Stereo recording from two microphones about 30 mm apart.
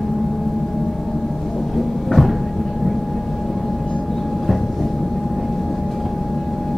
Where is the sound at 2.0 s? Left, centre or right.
Centre.